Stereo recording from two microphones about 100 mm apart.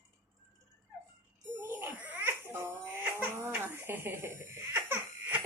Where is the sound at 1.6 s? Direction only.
20° right (ahead or behind).